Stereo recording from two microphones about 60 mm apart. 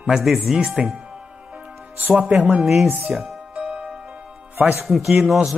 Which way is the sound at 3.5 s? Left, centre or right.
Centre.